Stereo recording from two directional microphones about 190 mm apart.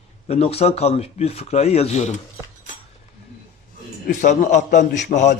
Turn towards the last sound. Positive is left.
turn(degrees=40)  # may be behind; listen again after turning